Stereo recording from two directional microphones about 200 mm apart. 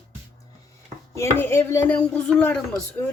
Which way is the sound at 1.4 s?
10° left (ahead or behind).